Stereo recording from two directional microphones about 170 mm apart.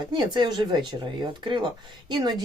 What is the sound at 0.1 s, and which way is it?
Speech, 25° right (ahead or behind).